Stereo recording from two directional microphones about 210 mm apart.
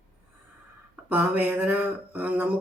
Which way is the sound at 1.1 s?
5° right (ahead or behind).